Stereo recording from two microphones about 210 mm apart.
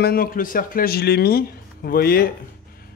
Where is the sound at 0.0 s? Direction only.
45° left (ahead or behind).